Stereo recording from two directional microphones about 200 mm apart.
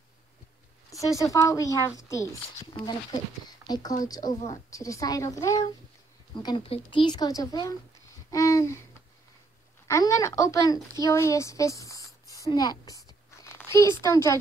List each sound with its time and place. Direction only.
0.8 s speech: 15° left (ahead or behind)
9.8 s a woman's voice: 15° left (ahead or behind)